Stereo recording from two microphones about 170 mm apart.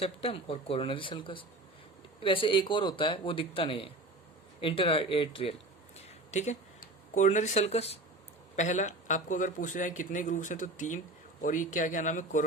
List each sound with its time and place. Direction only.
0.0 s speech: 35° left (ahead or behind)
6.3 s a man's voice: 45° left (ahead or behind)